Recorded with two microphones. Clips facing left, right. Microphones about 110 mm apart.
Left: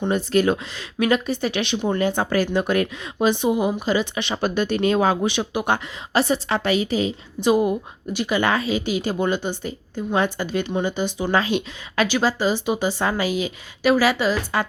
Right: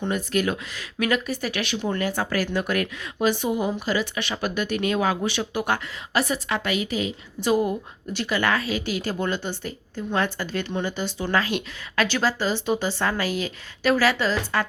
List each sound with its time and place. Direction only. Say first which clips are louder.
0.1 s speech: left 6 dB; 30° left (ahead or behind)
7.3 s a woman's voice: left 3 dB; 20° left (ahead or behind)